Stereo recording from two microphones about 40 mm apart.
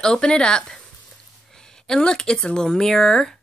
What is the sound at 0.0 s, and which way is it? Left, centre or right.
Speech, centre.